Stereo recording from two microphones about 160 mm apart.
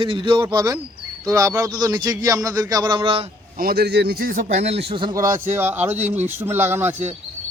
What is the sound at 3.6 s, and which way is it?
A man's voice, 75° right (ahead or behind).